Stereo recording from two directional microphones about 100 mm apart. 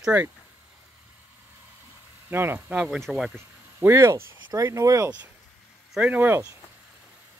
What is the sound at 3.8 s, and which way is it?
Speech, 25° right (ahead or behind).